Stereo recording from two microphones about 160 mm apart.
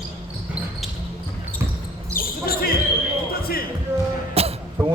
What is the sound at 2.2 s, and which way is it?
Basketball bounce, 65° left (ahead or behind).